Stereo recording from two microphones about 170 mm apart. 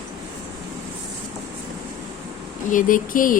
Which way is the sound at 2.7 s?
50° left (ahead or behind).